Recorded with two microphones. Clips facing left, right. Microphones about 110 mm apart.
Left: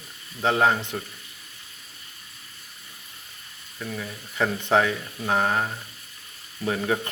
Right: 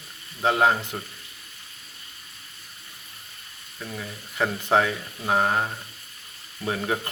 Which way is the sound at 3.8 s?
10° right (ahead or behind).